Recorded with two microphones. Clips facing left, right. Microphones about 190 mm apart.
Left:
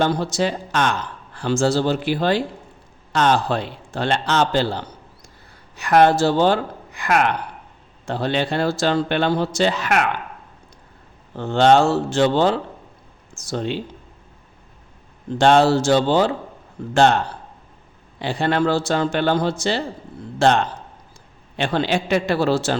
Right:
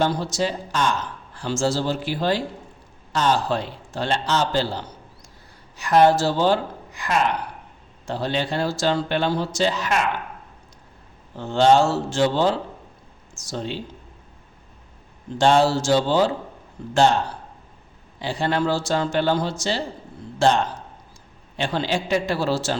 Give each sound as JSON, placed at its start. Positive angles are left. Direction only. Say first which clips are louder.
{"t": 0.0, "sound": "speech", "louder": "left 2 dB", "side_deg": 60}
{"t": 11.3, "sound": "speech", "louder": "left 2 dB", "side_deg": 60}
{"t": 15.4, "sound": "speech", "louder": "left 3 dB", "side_deg": 60}
{"t": 18.2, "sound": "speech", "louder": "left 3 dB", "side_deg": 60}